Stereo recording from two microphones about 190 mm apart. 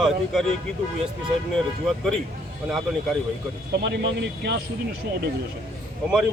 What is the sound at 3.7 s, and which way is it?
Speech, 65° right (ahead or behind).